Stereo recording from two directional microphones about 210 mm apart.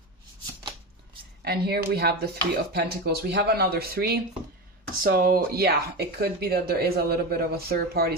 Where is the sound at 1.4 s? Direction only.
50° right (ahead or behind).